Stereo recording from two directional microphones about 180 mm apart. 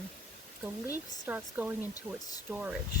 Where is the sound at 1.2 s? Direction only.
10° right (ahead or behind).